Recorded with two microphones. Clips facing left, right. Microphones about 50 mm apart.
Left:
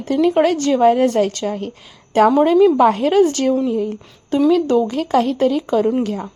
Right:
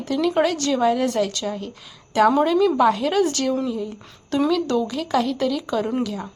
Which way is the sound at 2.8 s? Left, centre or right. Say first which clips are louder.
Left 5 dB; left.